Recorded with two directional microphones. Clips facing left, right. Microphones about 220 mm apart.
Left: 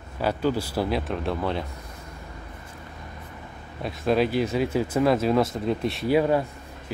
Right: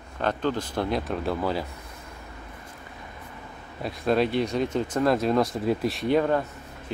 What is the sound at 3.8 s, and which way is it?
A man's voice, centre (ahead or behind).